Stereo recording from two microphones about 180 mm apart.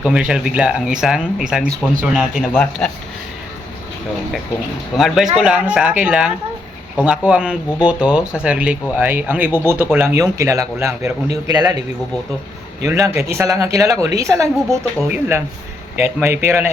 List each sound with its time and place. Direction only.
0.0 s speech: 5° right (ahead or behind)
4.9 s a man's voice: centre (ahead or behind); by 11.8 s 20° right (ahead or behind)
12.8 s speech: 15° right (ahead or behind)